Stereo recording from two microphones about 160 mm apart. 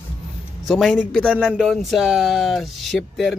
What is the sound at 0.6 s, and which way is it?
Speech, centre (ahead or behind).